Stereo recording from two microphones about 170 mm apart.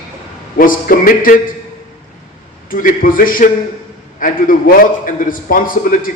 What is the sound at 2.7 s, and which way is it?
A man's voice, 55° left (ahead or behind).